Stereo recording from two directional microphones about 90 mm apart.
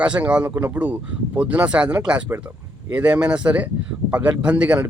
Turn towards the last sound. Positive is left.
turn(degrees=-15)  # may be behind; listen again after turning